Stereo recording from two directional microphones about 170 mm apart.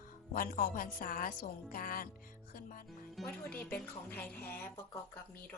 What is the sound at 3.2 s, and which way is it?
Music, centre (ahead or behind).